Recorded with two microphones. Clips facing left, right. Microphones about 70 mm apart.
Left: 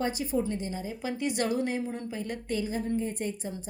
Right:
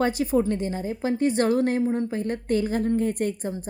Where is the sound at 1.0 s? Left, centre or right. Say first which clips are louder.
Right 8 dB; right.